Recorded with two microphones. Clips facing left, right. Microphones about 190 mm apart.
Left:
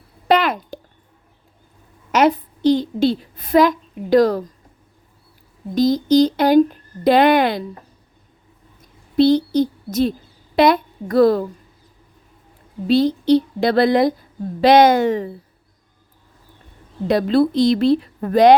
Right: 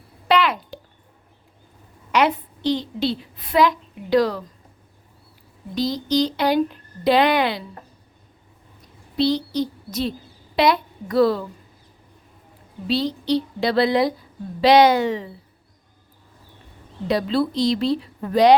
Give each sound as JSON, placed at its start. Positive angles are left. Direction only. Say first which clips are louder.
{"t": 0.3, "sound": "a sound", "louder": "left 3 dB", "side_deg": 45}
{"t": 2.1, "sound": "a sound", "louder": "left 4 dB", "side_deg": 40}
{"t": 5.7, "sound": "speech", "louder": "left 7 dB", "side_deg": 45}
{"t": 9.1, "sound": "a woman's voice", "louder": "left 7 dB", "side_deg": 50}
{"t": 12.9, "sound": "speech", "louder": "left 7 dB", "side_deg": 50}
{"t": 17.1, "sound": "speech", "louder": "left 5 dB", "side_deg": 50}